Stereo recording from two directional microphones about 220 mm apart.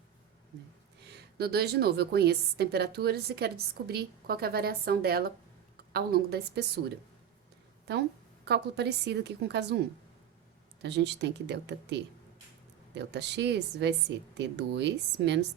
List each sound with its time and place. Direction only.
1.4 s a woman's voice: 45° right (ahead or behind)
10.8 s a woman's voice: 50° right (ahead or behind)